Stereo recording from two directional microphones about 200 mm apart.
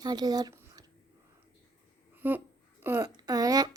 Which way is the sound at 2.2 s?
10° right (ahead or behind).